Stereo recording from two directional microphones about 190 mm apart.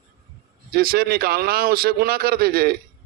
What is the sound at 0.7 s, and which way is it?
A man's voice, 50° right (ahead or behind).